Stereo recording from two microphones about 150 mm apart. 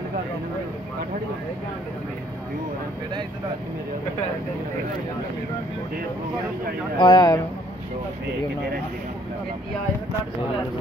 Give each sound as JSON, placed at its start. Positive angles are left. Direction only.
{"t": 7.0, "sound": "speech", "side_deg": 30}